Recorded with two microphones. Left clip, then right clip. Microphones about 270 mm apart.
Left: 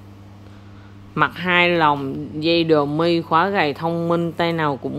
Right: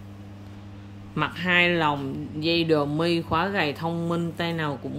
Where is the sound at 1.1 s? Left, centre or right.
Centre.